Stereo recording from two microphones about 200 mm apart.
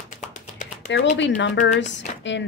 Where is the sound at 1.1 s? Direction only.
60° left (ahead or behind).